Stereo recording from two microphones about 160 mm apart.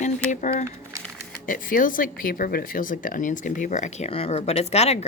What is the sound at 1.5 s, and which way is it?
Speech, 60° left (ahead or behind).